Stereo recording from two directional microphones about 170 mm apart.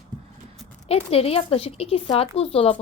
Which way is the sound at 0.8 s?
35° left (ahead or behind).